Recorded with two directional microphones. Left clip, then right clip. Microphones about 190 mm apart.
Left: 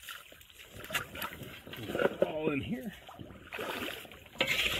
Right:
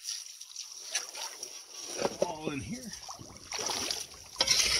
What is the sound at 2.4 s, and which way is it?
Speech, 15° right (ahead or behind).